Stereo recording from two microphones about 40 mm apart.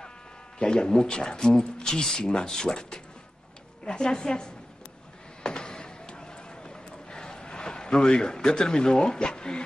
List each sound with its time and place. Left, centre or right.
0.6 s speech: left
5.4 s a sound: centre
8.5 s speech: centre